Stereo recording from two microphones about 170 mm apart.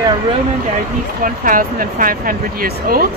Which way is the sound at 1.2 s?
55° right (ahead or behind).